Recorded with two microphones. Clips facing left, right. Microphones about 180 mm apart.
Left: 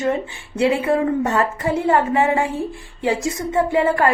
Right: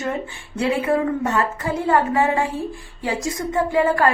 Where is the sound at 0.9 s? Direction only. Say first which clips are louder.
Left 2 dB; 30° left (ahead or behind).